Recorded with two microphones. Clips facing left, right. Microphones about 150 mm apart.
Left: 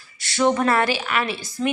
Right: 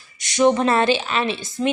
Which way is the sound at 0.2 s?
20° right (ahead or behind).